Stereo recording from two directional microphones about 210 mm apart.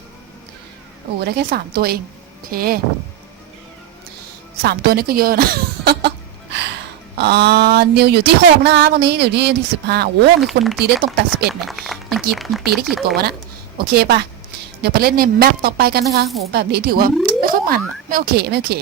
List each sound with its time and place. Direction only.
1.2 s speech: 55° right (ahead or behind)
4.6 s cough: 50° right (ahead or behind)
7.2 s speech: 50° right (ahead or behind)
11.6 s a sound: centre (ahead or behind)
12.4 s speech: centre (ahead or behind)
13.7 s speech: 50° right (ahead or behind)